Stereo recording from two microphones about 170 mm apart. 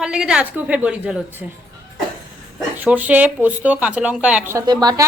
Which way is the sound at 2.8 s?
10° right (ahead or behind).